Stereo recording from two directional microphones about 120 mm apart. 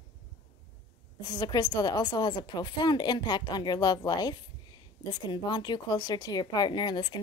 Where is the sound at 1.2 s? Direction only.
35° left (ahead or behind).